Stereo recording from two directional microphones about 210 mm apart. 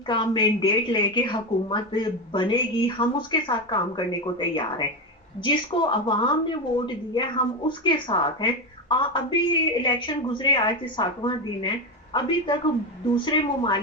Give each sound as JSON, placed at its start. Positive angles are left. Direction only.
{"t": 0.1, "sound": "a woman's voice", "side_deg": 20}